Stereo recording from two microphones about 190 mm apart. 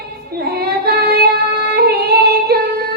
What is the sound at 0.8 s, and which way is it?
Child singing, 55° right (ahead or behind).